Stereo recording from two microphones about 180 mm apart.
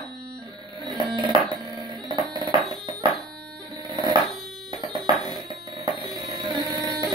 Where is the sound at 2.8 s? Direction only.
25° right (ahead or behind).